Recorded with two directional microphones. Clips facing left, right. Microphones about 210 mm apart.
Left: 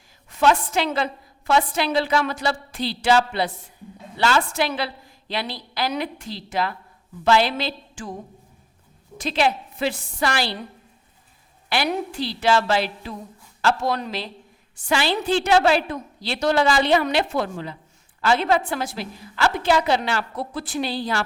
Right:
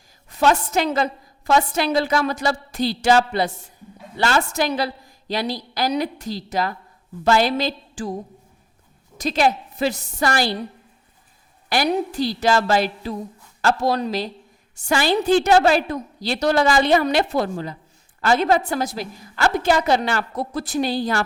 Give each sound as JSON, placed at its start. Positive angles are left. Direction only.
{"t": 0.3, "sound": "a woman's voice", "side_deg": -40}
{"t": 9.1, "sound": "a woman's voice", "side_deg": -40}
{"t": 11.7, "sound": "a woman's voice", "side_deg": -40}